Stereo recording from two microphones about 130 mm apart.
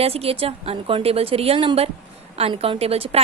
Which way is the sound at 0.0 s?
50° right (ahead or behind).